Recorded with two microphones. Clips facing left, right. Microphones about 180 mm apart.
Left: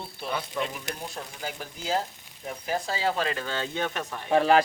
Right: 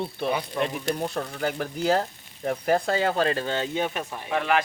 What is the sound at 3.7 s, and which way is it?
Speech, 10° right (ahead or behind).